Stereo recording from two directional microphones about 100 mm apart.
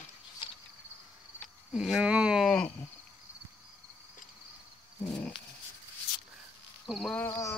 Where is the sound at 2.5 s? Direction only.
10° left (ahead or behind).